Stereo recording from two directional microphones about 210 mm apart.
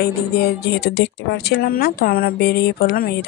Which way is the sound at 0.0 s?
50° left (ahead or behind).